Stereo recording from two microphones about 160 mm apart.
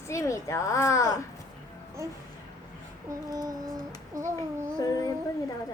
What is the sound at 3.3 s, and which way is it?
Speech, 20° right (ahead or behind).